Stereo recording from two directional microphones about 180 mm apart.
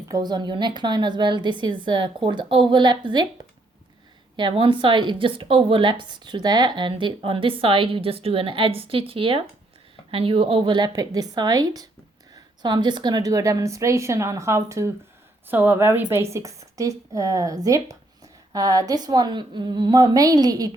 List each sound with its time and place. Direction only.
0.1 s a woman's voice: 25° right (ahead or behind)
4.4 s a woman's voice: 30° right (ahead or behind)